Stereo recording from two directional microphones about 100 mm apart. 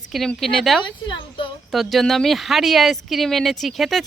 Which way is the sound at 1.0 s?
55° left (ahead or behind).